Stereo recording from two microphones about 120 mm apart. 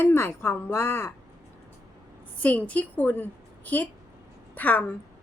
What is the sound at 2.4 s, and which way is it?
A woman's voice, 10° left (ahead or behind).